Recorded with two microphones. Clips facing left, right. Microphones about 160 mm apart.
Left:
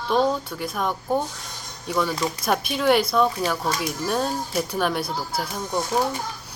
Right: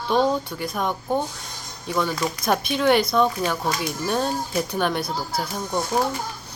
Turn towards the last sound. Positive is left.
turn(degrees=5)  # may be behind; listen again after turning